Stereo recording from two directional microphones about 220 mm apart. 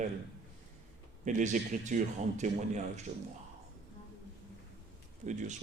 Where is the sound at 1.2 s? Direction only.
35° right (ahead or behind).